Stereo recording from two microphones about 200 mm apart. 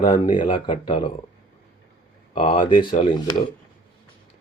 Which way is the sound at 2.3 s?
25° left (ahead or behind).